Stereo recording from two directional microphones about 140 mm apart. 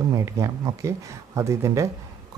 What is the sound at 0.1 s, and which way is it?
Speech, 20° right (ahead or behind).